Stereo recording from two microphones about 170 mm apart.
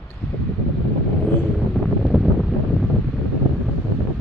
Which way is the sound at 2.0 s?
Centre (ahead or behind).